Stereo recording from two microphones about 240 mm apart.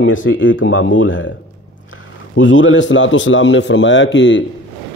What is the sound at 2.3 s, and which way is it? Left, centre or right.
A man's voice, left.